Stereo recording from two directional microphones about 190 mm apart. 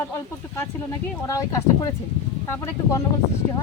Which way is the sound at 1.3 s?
15° left (ahead or behind).